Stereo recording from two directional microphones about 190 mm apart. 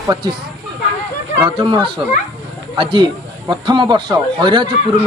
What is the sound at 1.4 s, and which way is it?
Speech, 25° right (ahead or behind).